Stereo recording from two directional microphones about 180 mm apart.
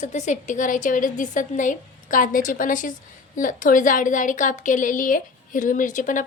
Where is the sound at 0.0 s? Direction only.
40° left (ahead or behind).